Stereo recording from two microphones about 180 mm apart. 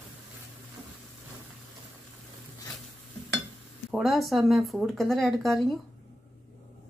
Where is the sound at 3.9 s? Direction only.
Centre (ahead or behind).